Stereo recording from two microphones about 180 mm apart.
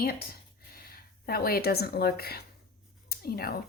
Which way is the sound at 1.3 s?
60° left (ahead or behind).